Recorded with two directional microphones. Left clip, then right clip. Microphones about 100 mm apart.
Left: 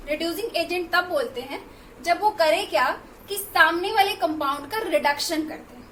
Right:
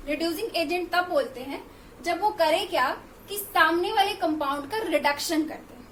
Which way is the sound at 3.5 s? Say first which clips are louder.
Left 3 dB; 20° right (ahead or behind).